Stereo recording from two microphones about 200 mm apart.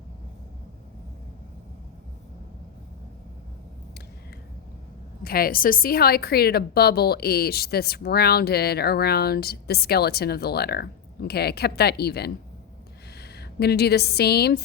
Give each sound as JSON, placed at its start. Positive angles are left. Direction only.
{"t": 5.2, "sound": "a woman's voice", "side_deg": 50}